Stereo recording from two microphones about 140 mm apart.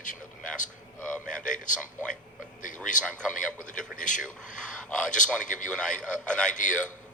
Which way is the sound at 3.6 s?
65° left (ahead or behind).